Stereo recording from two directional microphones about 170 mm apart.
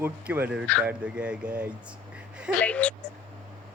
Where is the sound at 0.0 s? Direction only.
10° right (ahead or behind).